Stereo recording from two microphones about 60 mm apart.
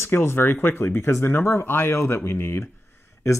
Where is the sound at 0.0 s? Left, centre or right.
Left.